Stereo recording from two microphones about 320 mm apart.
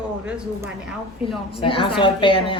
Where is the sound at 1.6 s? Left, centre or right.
Centre.